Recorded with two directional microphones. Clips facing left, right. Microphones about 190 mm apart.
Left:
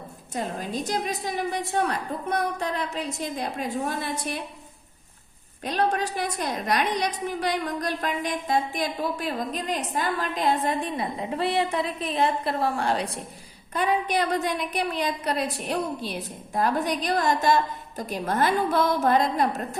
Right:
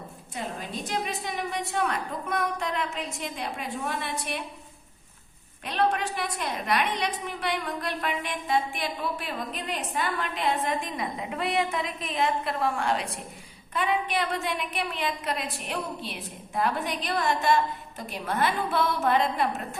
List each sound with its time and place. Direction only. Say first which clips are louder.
0.3 s a woman's voice: left 5 dB; 40° left (ahead or behind)
5.6 s a woman's voice: left 1 dB; 40° left (ahead or behind)